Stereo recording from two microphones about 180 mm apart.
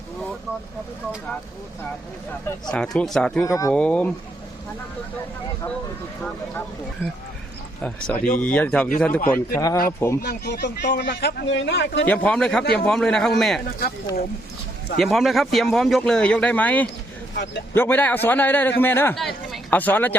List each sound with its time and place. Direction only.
2.7 s speech: 5° left (ahead or behind)
3.4 s a man's voice: 20° left (ahead or behind)
3.7 s a man's voice: 5° left (ahead or behind)
7.8 s a man's voice: 5° left (ahead or behind)
9.5 s speech: 20° left (ahead or behind)
10.2 s speech: 65° left (ahead or behind)
12.0 s a man's voice: 10° left (ahead or behind)
14.9 s speech: centre (ahead or behind)
17.3 s speech: 70° left (ahead or behind)
17.7 s a man's voice: 10° left (ahead or behind)